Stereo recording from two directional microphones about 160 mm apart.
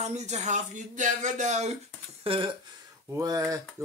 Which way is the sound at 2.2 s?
30° right (ahead or behind).